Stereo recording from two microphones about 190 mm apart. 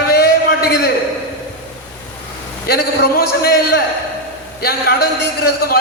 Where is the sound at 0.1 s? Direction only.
55° left (ahead or behind).